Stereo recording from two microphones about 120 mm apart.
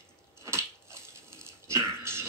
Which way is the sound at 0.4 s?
25° right (ahead or behind).